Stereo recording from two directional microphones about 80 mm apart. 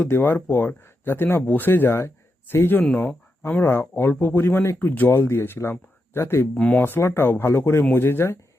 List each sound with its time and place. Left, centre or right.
0.0 s speech: left
2.8 s speech: centre
3.4 s speech: left
6.5 s speech: centre
6.8 s speech: left